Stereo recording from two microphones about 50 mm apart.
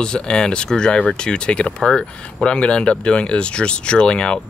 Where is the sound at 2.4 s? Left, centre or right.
Left.